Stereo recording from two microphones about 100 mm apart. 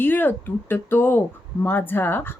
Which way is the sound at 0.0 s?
20° left (ahead or behind).